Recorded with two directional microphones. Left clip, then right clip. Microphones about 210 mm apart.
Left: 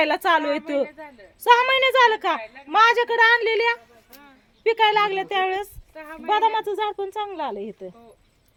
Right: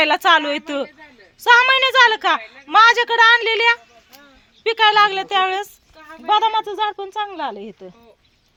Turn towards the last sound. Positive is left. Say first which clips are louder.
# right 2 dB
turn(degrees=-25)  # may be behind; listen again after turning